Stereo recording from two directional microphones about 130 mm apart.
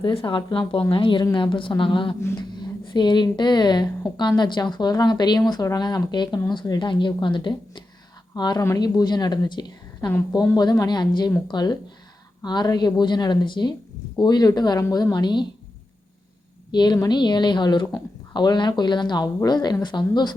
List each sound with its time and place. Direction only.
0.1 s a woman's voice: 40° left (ahead or behind)
16.7 s a woman's voice: 35° left (ahead or behind)